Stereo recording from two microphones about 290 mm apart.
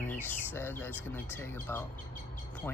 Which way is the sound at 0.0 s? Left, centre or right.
Centre.